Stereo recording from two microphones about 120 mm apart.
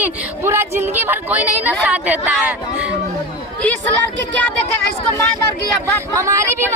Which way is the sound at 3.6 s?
15° left (ahead or behind).